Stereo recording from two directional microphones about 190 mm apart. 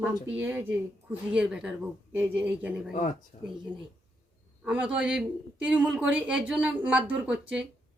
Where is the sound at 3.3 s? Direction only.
40° left (ahead or behind).